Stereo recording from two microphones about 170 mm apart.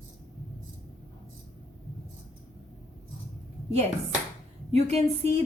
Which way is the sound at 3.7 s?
40° right (ahead or behind).